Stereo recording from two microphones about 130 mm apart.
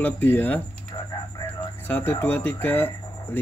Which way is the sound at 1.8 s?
15° left (ahead or behind).